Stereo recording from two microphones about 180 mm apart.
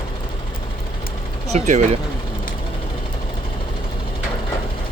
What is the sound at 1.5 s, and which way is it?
Speech, 40° right (ahead or behind).